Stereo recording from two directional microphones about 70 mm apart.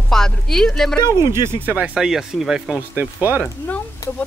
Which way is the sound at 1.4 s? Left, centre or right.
Right.